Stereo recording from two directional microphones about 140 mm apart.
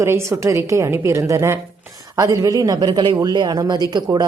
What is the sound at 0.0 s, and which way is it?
Speech, 20° right (ahead or behind).